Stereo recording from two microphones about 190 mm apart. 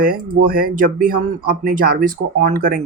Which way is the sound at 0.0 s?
50° right (ahead or behind).